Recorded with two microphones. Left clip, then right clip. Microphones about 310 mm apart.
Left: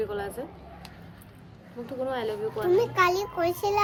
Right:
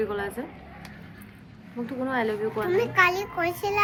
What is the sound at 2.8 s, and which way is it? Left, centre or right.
A child's voice, centre.